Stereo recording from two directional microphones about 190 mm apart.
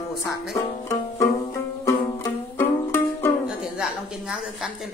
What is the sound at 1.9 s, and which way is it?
Music, 15° left (ahead or behind).